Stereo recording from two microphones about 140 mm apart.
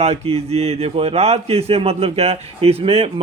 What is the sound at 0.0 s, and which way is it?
A man's voice, 45° right (ahead or behind).